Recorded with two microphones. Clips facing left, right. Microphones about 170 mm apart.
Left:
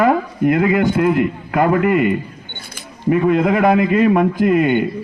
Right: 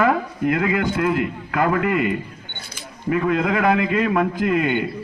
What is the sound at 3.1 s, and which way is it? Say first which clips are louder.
A man's voice: left 5 dB; 25° left (ahead or behind).